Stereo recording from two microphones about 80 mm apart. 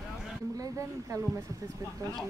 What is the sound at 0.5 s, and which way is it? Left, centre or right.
Speech, right.